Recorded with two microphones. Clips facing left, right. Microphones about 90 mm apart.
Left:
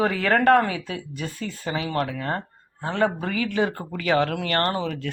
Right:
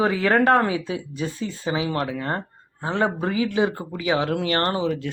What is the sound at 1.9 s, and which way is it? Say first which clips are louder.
Speech: even; 25° right (ahead or behind).